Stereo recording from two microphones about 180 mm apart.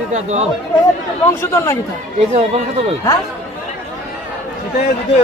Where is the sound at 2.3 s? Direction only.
35° right (ahead or behind).